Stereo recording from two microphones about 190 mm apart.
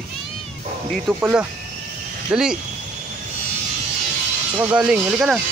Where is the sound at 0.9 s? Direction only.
5° right (ahead or behind).